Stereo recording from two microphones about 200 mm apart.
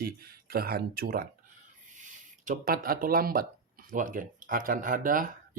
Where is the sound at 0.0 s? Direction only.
50° right (ahead or behind).